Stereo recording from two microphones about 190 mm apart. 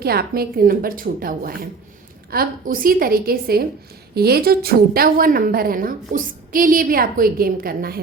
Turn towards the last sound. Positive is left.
turn(degrees=-50)  # may be behind; listen again after turning